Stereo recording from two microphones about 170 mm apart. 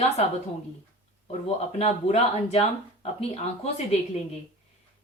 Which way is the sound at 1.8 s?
40° left (ahead or behind).